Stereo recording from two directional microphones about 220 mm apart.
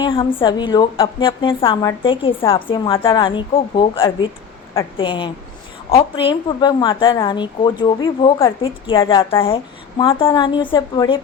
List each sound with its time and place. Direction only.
0.0 s a woman's voice: 25° left (ahead or behind)